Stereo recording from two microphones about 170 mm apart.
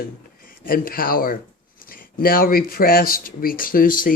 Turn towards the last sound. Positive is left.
turn(degrees=55)  # may be behind; listen again after turning